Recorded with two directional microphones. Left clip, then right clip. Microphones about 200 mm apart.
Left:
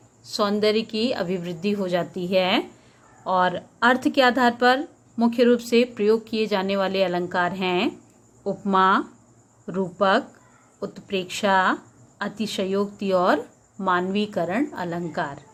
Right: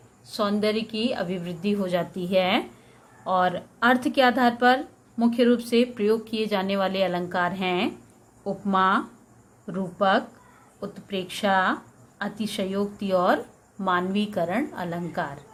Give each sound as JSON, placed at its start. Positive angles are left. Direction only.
{"t": 0.3, "sound": "speech", "side_deg": 25}